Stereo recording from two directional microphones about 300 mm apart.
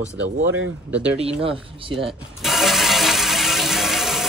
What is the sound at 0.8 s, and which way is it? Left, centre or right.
Speech, centre.